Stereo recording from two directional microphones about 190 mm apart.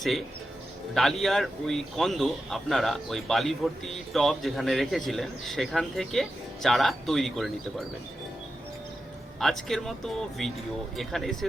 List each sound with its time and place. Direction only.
0.9 s a man's voice: centre (ahead or behind)
9.4 s a man's voice: centre (ahead or behind)